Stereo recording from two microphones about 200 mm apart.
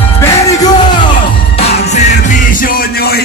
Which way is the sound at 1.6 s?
35° left (ahead or behind).